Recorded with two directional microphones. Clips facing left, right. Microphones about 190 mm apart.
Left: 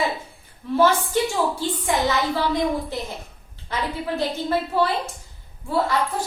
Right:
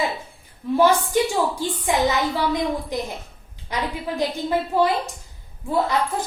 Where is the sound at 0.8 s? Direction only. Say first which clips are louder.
Right 1 dB; 15° right (ahead or behind).